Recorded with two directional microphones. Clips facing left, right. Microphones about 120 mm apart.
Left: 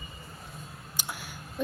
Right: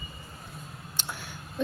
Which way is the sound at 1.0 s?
10° left (ahead or behind).